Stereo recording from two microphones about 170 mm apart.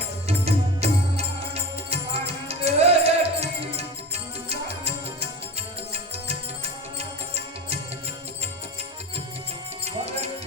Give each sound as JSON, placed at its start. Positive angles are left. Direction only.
{"t": 0.3, "sound": "music", "side_deg": -40}
{"t": 9.8, "sound": "music", "side_deg": -40}